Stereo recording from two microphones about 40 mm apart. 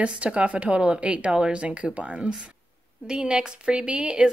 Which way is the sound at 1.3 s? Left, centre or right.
Centre.